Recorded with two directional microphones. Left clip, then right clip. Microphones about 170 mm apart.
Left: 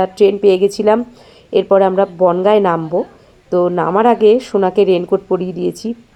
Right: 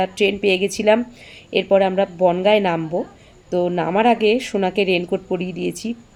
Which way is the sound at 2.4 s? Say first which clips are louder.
Left 4 dB; 5° left (ahead or behind).